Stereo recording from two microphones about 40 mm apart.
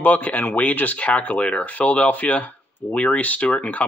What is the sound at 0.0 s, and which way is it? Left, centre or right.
Speech, left.